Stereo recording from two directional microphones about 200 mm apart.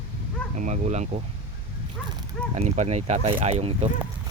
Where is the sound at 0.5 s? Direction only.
35° right (ahead or behind).